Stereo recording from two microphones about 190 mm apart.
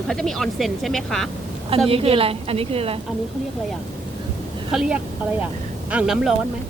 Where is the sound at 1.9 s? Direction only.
30° right (ahead or behind).